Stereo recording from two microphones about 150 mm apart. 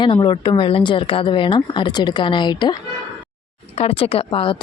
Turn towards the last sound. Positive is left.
turn(degrees=35)  # may be behind; listen again after turning